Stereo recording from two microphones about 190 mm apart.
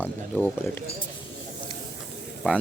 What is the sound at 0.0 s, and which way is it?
Speech, 5° left (ahead or behind).